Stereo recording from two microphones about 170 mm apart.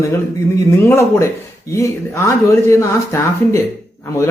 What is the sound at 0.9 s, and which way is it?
Speech, 15° left (ahead or behind).